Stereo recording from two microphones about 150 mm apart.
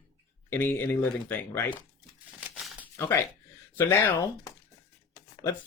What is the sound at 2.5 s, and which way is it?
Crumpling, 5° right (ahead or behind).